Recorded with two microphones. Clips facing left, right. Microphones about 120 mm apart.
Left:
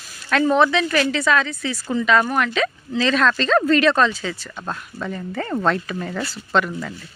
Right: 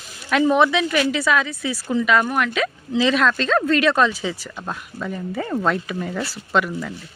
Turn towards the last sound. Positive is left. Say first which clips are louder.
# even
turn(degrees=-10)  # may be behind; listen again after turning